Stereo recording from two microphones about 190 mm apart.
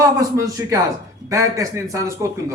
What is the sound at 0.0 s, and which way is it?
A man's voice, 15° right (ahead or behind).